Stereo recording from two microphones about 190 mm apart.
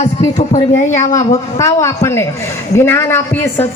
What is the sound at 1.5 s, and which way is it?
A man's voice, 15° left (ahead or behind).